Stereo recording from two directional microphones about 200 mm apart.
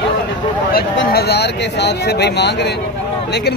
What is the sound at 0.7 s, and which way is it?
Speech, 50° left (ahead or behind).